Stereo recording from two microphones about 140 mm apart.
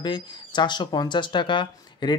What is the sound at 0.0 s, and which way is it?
A man's voice, 35° left (ahead or behind).